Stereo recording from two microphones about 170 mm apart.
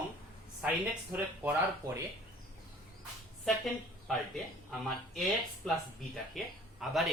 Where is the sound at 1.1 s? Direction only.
10° right (ahead or behind).